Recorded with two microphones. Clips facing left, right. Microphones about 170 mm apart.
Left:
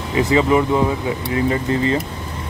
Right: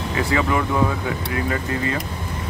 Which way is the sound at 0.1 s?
20° left (ahead or behind).